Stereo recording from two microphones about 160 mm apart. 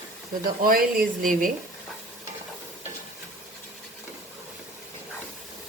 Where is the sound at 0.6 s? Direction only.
65° right (ahead or behind).